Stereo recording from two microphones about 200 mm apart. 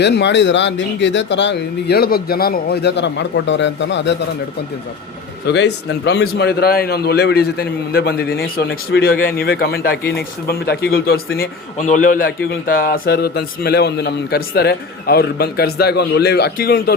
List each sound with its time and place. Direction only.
0.0 s speech: 60° left (ahead or behind)
5.5 s a man's voice: 60° left (ahead or behind)
11.3 s a man's voice: 40° left (ahead or behind)